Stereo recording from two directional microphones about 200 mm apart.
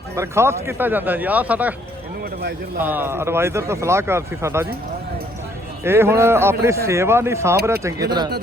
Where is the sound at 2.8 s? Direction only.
10° right (ahead or behind).